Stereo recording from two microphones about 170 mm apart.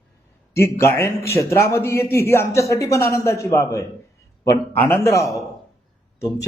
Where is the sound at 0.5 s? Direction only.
15° left (ahead or behind).